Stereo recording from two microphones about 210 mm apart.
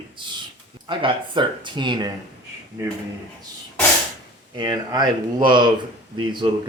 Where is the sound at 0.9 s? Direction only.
20° right (ahead or behind).